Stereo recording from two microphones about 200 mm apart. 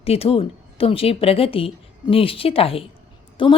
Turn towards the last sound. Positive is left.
turn(degrees=25)  # may be behind; listen again after turning